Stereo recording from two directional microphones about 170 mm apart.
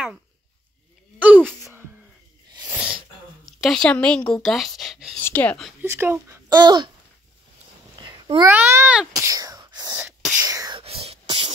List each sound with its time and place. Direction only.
1.2 s a sound: 10° right (ahead or behind)
2.6 s sneeze: 5° right (ahead or behind)
3.4 s a woman's voice: centre (ahead or behind)
5.2 s speech: 10° left (ahead or behind)
5.8 s speech: 15° right (ahead or behind)
8.0 s cat: 25° right (ahead or behind)
8.5 s wail: 10° right (ahead or behind)
10.4 s whispering: 20° right (ahead or behind)
10.8 s whispering: 35° right (ahead or behind)
11.2 s a sound: 30° right (ahead or behind)